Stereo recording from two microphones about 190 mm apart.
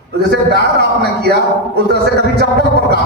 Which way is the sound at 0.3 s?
60° right (ahead or behind).